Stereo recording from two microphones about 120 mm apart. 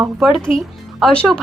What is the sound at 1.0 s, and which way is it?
Speech, 5° left (ahead or behind).